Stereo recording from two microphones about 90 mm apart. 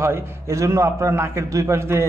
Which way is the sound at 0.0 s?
30° right (ahead or behind).